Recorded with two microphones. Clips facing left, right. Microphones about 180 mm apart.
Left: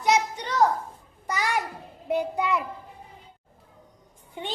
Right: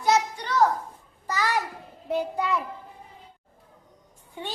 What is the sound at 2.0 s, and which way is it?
Child singing, 15° left (ahead or behind).